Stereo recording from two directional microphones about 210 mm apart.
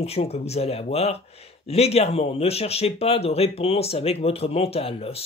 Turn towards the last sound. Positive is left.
turn(degrees=30)  # may be behind; listen again after turning